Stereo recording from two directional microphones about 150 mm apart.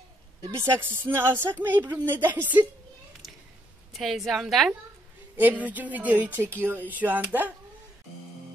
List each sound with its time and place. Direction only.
0.5 s speech: 15° right (ahead or behind)
3.9 s a woman's voice: centre (ahead or behind)